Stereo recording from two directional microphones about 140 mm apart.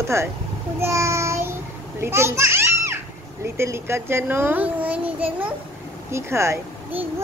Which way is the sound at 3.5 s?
20° right (ahead or behind).